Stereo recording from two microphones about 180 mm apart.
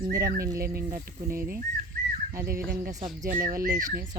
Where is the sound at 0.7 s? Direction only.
50° right (ahead or behind).